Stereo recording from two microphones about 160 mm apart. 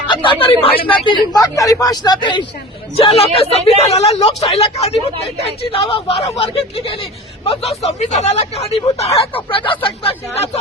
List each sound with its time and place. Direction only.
0.1 s speech: 30° left (ahead or behind)